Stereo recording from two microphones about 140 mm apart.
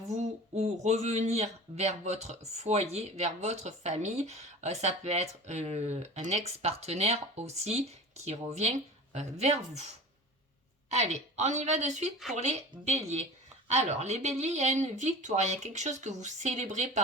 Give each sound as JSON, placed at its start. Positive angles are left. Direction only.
{"t": 0.1, "sound": "speech", "side_deg": -55}
{"t": 10.8, "sound": "speech", "side_deg": -50}